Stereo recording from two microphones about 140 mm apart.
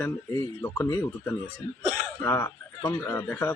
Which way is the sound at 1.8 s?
55° right (ahead or behind).